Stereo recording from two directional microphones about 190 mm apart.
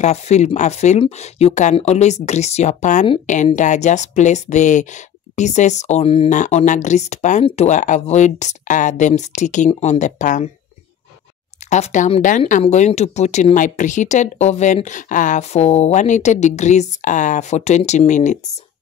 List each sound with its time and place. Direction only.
0.0 s speech: 35° left (ahead or behind)
11.7 s speech: 40° left (ahead or behind)